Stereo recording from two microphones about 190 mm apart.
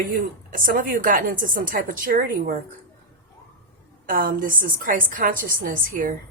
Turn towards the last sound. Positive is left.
turn(degrees=-50)  # may be behind; listen again after turning